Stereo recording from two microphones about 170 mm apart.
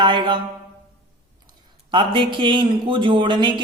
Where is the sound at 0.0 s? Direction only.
30° right (ahead or behind).